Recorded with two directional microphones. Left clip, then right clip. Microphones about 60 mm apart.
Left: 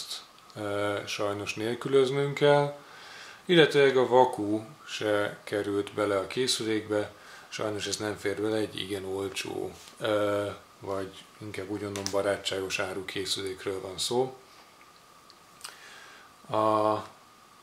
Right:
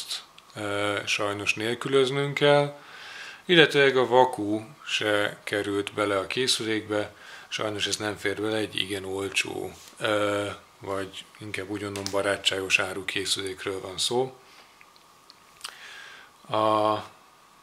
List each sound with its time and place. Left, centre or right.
0.1 s speech: right
15.6 s a sound: right
16.4 s speech: right